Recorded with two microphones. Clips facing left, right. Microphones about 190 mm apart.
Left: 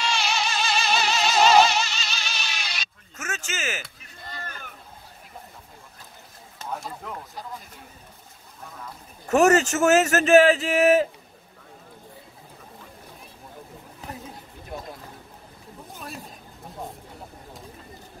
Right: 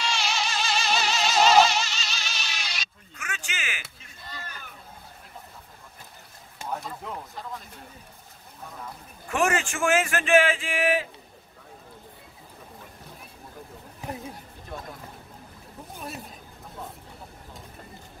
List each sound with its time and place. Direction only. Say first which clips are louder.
0.0 s music: left 2 dB; 60° left (ahead or behind); by 3.8 s 45° left (ahead or behind)
4.3 s a sound: left 3 dB; 50° left (ahead or behind)
9.3 s a man's voice: left 8 dB; 40° left (ahead or behind)